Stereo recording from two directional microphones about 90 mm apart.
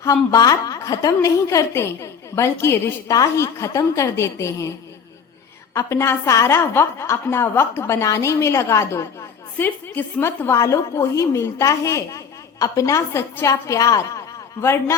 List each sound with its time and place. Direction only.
0.0 s a woman's voice: 35° left (ahead or behind)
5.7 s a woman's voice: 30° left (ahead or behind)